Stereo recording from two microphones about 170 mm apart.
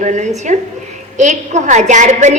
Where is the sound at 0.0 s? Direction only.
45° right (ahead or behind).